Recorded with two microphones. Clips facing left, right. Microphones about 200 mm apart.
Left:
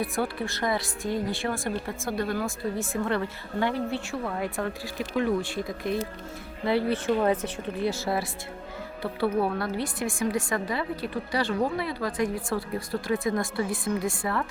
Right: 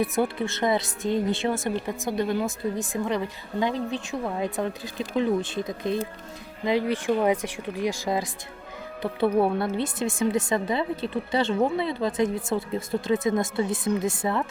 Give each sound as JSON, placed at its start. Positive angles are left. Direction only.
{"t": 0.0, "sound": "speech", "side_deg": -20}